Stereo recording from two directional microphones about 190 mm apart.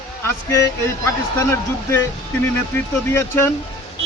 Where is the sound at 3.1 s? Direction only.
10° left (ahead or behind).